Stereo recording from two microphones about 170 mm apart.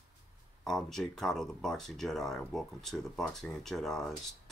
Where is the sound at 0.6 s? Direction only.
Centre (ahead or behind).